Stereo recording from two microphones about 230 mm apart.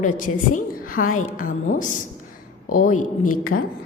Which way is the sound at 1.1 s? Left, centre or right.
Left.